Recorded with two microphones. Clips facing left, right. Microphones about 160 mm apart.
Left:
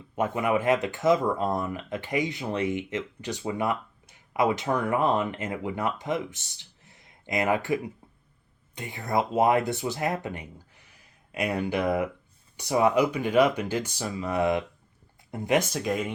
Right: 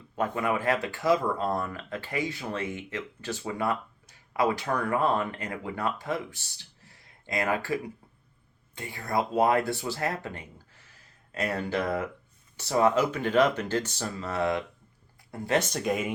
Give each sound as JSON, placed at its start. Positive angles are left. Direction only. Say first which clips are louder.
{"t": 0.2, "sound": "speech", "louder": "left 3 dB", "side_deg": 20}